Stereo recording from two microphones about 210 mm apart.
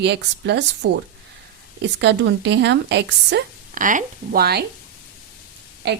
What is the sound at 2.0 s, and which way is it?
A woman's voice, 55° right (ahead or behind).